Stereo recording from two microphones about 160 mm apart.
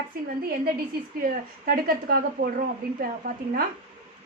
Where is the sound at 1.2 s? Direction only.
65° right (ahead or behind).